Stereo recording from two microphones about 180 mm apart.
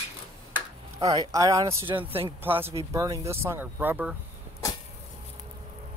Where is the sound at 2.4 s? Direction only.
10° right (ahead or behind).